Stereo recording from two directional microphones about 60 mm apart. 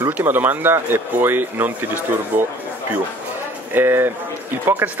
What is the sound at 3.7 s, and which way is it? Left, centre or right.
Speech, right.